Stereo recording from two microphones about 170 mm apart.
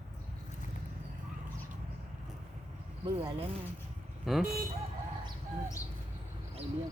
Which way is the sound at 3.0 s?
20° right (ahead or behind).